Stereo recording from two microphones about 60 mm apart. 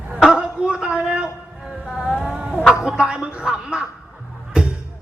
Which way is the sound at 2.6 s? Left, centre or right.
Centre.